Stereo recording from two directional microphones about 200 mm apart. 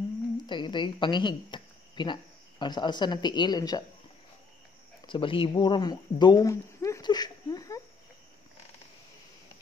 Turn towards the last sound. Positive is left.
turn(degrees=15)  # may be behind; listen again after turning